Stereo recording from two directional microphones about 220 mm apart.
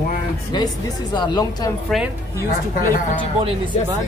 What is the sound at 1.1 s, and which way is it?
Speech, 20° left (ahead or behind).